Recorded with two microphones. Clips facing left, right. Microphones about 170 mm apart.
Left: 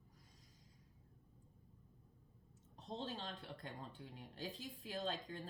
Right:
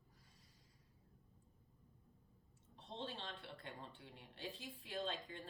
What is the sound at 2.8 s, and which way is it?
A woman's voice, 40° left (ahead or behind).